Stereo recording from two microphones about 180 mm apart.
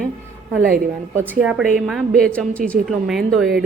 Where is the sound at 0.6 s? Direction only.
50° right (ahead or behind).